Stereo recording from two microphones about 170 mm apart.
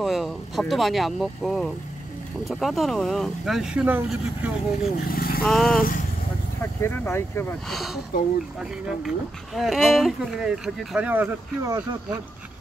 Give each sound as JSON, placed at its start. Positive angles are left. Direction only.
{"t": 0.0, "sound": "speech", "side_deg": 0}
{"t": 5.0, "sound": "speech", "side_deg": 60}
{"t": 5.4, "sound": "speech", "side_deg": 0}
{"t": 6.6, "sound": "speech", "side_deg": 15}
{"t": 7.6, "sound": "speech", "side_deg": 0}